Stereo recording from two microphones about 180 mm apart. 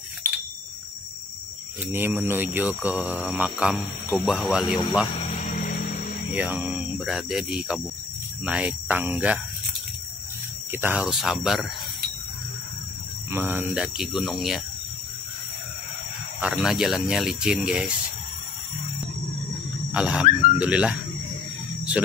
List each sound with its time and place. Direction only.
1.9 s speech: 10° right (ahead or behind)
5.3 s music: 45° left (ahead or behind)
6.3 s speech: 10° right (ahead or behind)
10.7 s speech: 10° right (ahead or behind)
13.3 s speech: 10° right (ahead or behind)
16.3 s speech: 5° right (ahead or behind)
19.9 s a sound: 5° right (ahead or behind)
20.5 s speech: 5° right (ahead or behind)
22.0 s speech: 5° right (ahead or behind)